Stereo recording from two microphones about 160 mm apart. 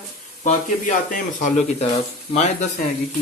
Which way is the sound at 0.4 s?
50° left (ahead or behind).